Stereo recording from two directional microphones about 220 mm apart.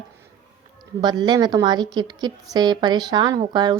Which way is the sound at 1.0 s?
20° right (ahead or behind).